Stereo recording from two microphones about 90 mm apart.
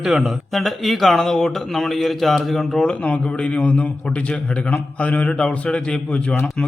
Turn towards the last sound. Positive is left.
turn(degrees=15)  # may be behind; listen again after turning